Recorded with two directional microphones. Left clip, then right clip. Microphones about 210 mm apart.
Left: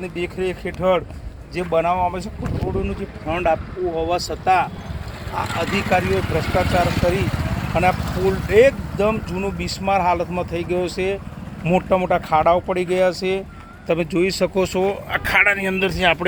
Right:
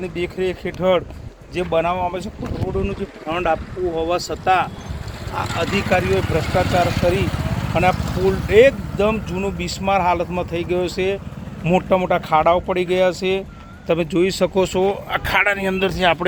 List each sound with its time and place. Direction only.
0.3 s speech: centre (ahead or behind)
3.2 s speech: 10° right (ahead or behind)
5.5 s speech: 25° left (ahead or behind)
5.7 s speech: 5° right (ahead or behind)